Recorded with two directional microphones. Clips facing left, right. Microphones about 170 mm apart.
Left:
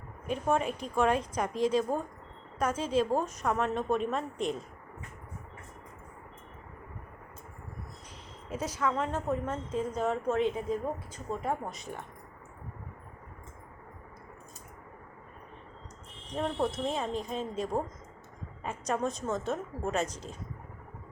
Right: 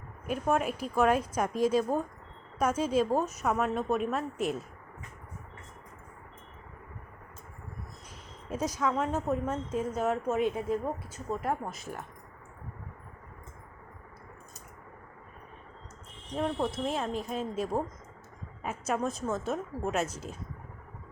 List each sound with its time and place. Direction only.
0.3 s a woman's voice: 5° right (ahead or behind)
8.4 s a woman's voice: 15° right (ahead or behind)
16.3 s a woman's voice: centre (ahead or behind)